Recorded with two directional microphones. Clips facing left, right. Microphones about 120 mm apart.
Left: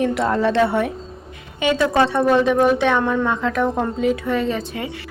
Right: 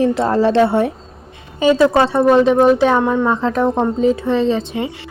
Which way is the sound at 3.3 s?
30° right (ahead or behind).